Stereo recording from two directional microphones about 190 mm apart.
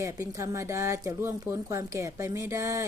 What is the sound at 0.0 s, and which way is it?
A woman's voice, 15° right (ahead or behind).